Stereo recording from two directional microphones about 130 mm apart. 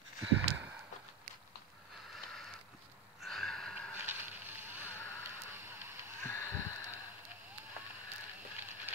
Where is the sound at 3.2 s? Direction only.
Centre (ahead or behind).